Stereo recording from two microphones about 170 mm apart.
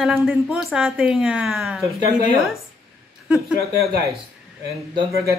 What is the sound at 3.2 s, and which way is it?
Speech, centre (ahead or behind).